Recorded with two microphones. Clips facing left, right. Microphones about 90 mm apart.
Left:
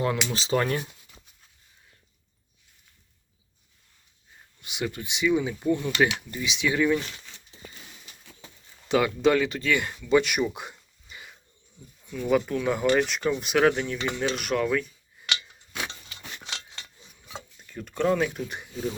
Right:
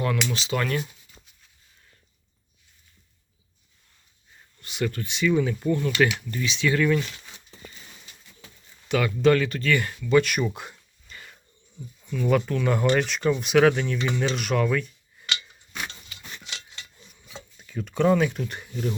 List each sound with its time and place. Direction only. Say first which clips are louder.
0.3 s speech: left 1 dB; 30° left (ahead or behind)
4.6 s speech: right 3 dB; 15° left (ahead or behind)
8.9 s speech: right 1 dB; 20° left (ahead or behind)
17.6 s speech: right 4 dB; centre (ahead or behind)